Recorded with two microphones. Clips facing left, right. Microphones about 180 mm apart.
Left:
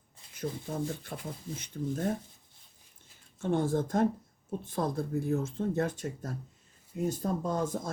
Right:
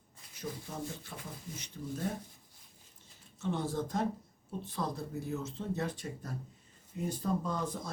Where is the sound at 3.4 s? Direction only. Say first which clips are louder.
Left 6 dB; 50° left (ahead or behind).